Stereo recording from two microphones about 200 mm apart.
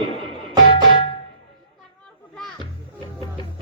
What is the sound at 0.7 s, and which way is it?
Music, 25° left (ahead or behind).